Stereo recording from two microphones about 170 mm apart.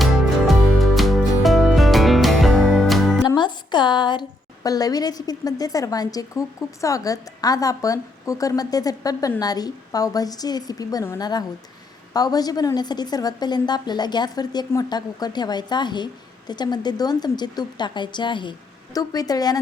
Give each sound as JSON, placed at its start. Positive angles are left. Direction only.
{"t": 0.0, "sound": "music", "side_deg": 0}
{"t": 3.2, "sound": "a woman's voice", "side_deg": 25}